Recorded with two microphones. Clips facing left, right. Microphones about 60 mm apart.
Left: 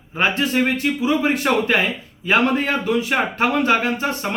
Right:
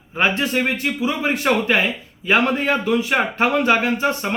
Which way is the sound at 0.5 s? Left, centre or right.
Right.